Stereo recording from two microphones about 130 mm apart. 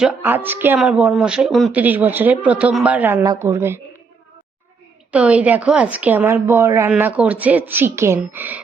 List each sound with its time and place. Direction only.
0.0 s a woman's voice: 10° right (ahead or behind)
1.7 s a woman's voice: 10° right (ahead or behind)
5.1 s a woman's voice: 10° right (ahead or behind)